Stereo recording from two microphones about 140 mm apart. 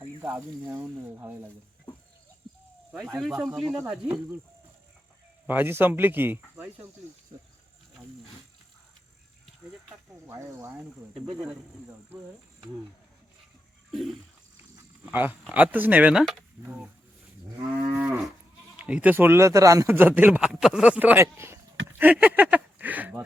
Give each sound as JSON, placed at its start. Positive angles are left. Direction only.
{"t": 0.2, "sound": "a man's voice", "side_deg": -15}
{"t": 2.9, "sound": "a man's voice", "side_deg": 0}
{"t": 5.5, "sound": "a man's voice", "side_deg": -15}
{"t": 10.2, "sound": "speech", "side_deg": -20}
{"t": 15.0, "sound": "a man's voice", "side_deg": -10}
{"t": 17.9, "sound": "moo", "side_deg": -10}
{"t": 18.8, "sound": "a man's voice", "side_deg": -10}